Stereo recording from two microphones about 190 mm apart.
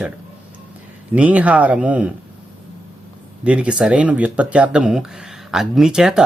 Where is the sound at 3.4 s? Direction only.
5° right (ahead or behind).